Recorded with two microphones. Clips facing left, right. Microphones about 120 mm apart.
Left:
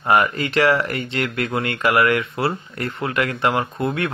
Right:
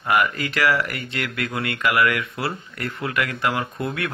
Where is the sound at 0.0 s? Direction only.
30° left (ahead or behind).